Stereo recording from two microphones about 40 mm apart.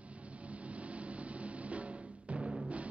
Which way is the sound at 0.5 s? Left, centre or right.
Right.